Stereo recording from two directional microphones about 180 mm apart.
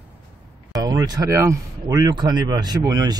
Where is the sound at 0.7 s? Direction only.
20° right (ahead or behind).